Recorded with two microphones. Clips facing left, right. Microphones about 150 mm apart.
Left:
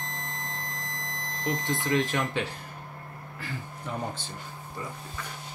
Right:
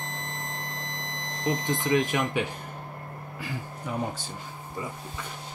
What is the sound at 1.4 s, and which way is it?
Speech, 20° right (ahead or behind).